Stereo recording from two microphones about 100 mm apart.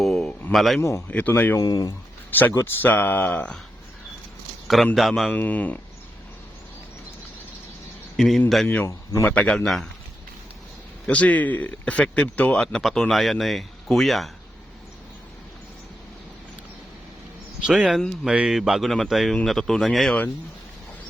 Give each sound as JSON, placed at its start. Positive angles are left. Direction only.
{"t": 0.0, "sound": "a sound", "side_deg": 5}
{"t": 0.5, "sound": "speech", "side_deg": 0}
{"t": 0.8, "sound": "speech", "side_deg": 30}
{"t": 1.0, "sound": "speech", "side_deg": 15}
{"t": 1.6, "sound": "speech", "side_deg": 40}
{"t": 2.3, "sound": "speech", "side_deg": 20}
{"t": 4.9, "sound": "speech", "side_deg": 0}
{"t": 5.3, "sound": "speech", "side_deg": 15}
{"t": 8.1, "sound": "speech", "side_deg": 0}
{"t": 8.6, "sound": "speech", "side_deg": 20}
{"t": 8.9, "sound": "speech", "side_deg": 30}
{"t": 9.3, "sound": "speech", "side_deg": 10}
{"t": 11.0, "sound": "speech", "side_deg": 15}
{"t": 17.7, "sound": "speech", "side_deg": -5}